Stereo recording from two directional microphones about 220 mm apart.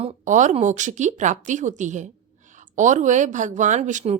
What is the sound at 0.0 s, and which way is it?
A woman's voice, 30° right (ahead or behind).